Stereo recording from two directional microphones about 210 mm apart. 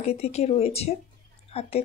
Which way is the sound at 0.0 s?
30° left (ahead or behind).